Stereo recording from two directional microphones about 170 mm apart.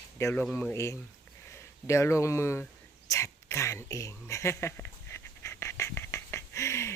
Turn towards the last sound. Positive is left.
turn(degrees=15)  # may be behind; listen again after turning